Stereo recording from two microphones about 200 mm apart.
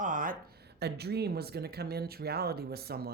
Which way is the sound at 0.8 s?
55° right (ahead or behind).